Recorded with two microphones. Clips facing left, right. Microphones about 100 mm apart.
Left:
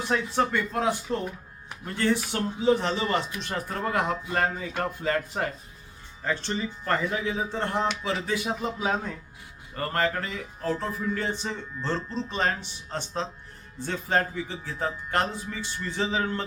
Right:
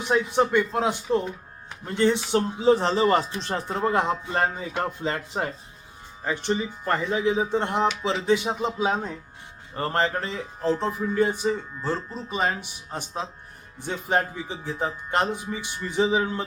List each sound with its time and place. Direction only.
0.0 s speech: 20° right (ahead or behind)